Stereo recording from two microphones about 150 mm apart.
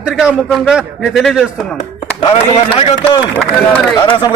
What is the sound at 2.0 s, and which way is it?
Speech, 35° left (ahead or behind).